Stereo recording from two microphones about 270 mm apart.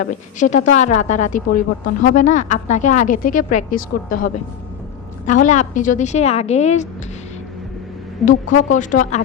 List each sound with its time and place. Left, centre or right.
0.0 s a woman's voice: left
8.2 s a woman's voice: left